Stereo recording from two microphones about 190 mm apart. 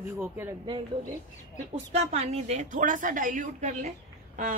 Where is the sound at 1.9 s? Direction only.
35° right (ahead or behind).